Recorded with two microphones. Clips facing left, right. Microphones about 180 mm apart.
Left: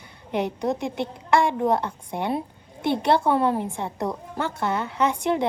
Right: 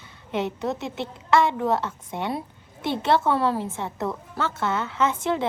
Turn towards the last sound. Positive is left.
turn(degrees=15)  # may be behind; listen again after turning